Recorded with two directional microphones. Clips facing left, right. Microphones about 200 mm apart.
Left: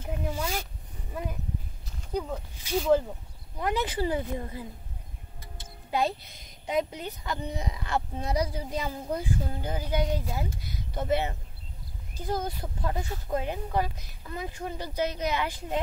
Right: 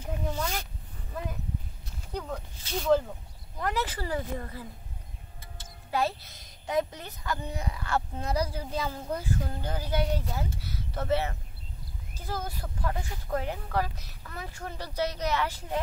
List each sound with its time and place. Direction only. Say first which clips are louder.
0.0 s a sound: even; 10° left (ahead or behind)
2.1 s speech: left 4 dB; 10° left (ahead or behind)
5.9 s speech: left 1 dB; 20° left (ahead or behind)